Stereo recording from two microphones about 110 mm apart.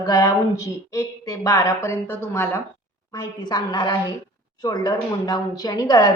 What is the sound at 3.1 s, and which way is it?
A woman's voice, 35° left (ahead or behind).